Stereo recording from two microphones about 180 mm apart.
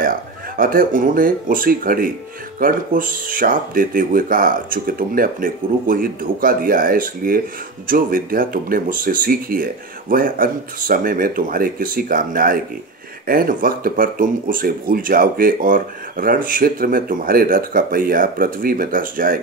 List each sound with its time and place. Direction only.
0.6 s speech: 50° right (ahead or behind)